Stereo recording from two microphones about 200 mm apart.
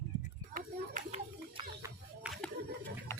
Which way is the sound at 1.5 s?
20° right (ahead or behind).